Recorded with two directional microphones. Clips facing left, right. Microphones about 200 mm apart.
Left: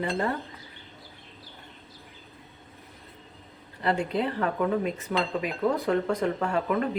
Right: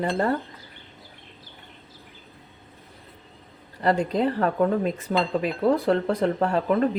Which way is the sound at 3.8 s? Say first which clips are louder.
Right 4 dB; 40° right (ahead or behind).